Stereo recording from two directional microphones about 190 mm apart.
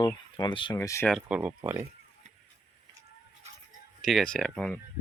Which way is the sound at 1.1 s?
5° right (ahead or behind).